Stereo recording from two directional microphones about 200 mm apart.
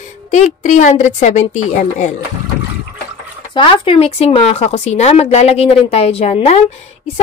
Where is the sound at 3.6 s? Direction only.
25° left (ahead or behind).